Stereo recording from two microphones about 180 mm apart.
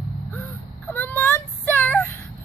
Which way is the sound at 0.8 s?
10° left (ahead or behind).